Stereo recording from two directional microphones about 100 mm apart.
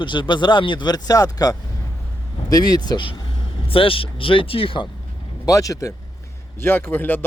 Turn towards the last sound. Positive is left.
turn(degrees=20)  # may be behind; listen again after turning